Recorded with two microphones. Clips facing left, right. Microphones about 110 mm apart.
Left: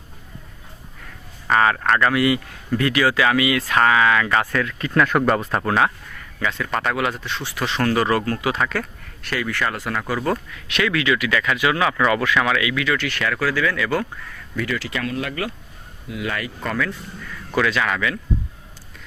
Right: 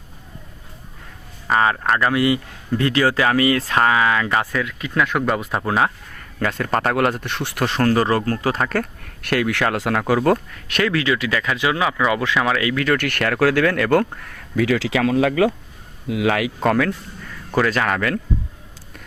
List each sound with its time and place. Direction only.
1.5 s speech: 25° right (ahead or behind)
4.5 s speech: 5° right (ahead or behind)
5.5 s speech: 15° right (ahead or behind)
6.1 s speech: 45° right (ahead or behind)
7.8 s speech: 35° right (ahead or behind); by 10.0 s 80° right
10.2 s speech: 45° right (ahead or behind)
14.5 s speech: 90° right
16.6 s speech: 65° right (ahead or behind)
17.5 s speech: 40° right (ahead or behind)